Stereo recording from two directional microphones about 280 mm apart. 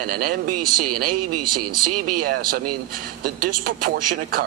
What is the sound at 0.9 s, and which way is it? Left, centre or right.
Speech, right.